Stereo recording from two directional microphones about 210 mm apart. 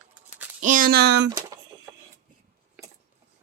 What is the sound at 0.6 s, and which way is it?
Speech, 40° right (ahead or behind).